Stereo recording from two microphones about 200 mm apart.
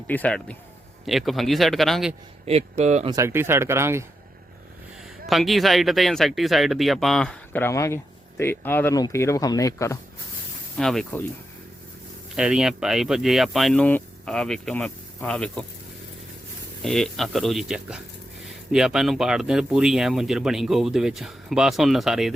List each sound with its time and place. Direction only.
0.1 s speech: 5° left (ahead or behind)
2.5 s speech: 35° right (ahead or behind)
3.1 s speech: 15° right (ahead or behind)
5.2 s speech: centre (ahead or behind)
10.8 s speech: centre (ahead or behind)
12.4 s speech: 5° right (ahead or behind)
16.8 s speech: centre (ahead or behind)